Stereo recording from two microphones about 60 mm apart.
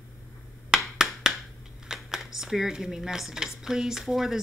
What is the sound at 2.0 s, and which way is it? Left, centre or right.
Speech, centre.